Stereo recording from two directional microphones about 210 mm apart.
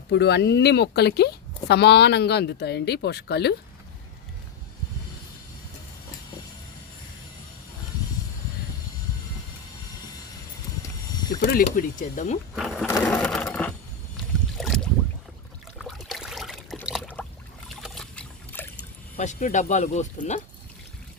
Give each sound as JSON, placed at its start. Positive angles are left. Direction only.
{"t": 0.1, "sound": "speech", "side_deg": 55}
{"t": 11.1, "sound": "a sound", "side_deg": 20}
{"t": 11.3, "sound": "a sound", "side_deg": 45}
{"t": 11.6, "sound": "speech", "side_deg": 40}
{"t": 12.5, "sound": "sewing machine", "side_deg": 0}
{"t": 14.6, "sound": "boat", "side_deg": 0}
{"t": 15.8, "sound": "trickle", "side_deg": 0}
{"t": 19.1, "sound": "speech", "side_deg": 35}